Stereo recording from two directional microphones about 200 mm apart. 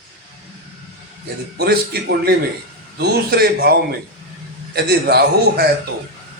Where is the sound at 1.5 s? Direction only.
55° right (ahead or behind).